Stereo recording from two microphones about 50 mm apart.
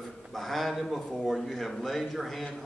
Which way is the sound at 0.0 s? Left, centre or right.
Centre.